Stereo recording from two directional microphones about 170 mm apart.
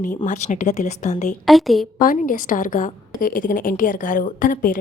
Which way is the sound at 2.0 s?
55° left (ahead or behind).